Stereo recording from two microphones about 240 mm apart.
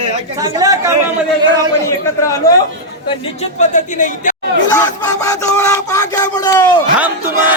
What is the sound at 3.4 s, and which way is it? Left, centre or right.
Speech, left.